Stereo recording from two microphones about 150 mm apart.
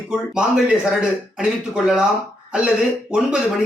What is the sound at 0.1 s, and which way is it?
Speech, 5° right (ahead or behind).